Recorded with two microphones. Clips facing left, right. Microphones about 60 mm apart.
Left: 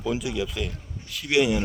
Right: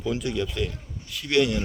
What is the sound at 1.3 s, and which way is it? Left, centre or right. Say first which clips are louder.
Speech: left 1 dB; centre.